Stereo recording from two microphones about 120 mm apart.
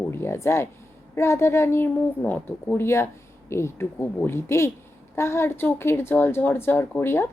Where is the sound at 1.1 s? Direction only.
20° left (ahead or behind).